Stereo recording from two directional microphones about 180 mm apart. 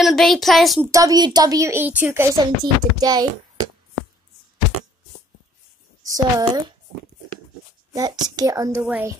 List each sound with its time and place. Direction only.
0.0 s a woman's voice: centre (ahead or behind)
0.9 s a woman's voice: 20° right (ahead or behind)
6.0 s a woman's voice: 20° right (ahead or behind)
7.9 s a child's voice: 20° right (ahead or behind)